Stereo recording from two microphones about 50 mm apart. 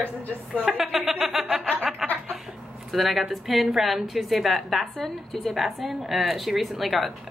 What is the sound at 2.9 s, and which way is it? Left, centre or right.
A woman's voice, centre.